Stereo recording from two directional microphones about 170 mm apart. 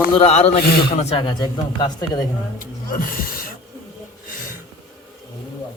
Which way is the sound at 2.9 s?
55° left (ahead or behind).